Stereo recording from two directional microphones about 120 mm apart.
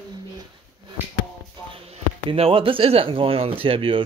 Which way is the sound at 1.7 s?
50° right (ahead or behind).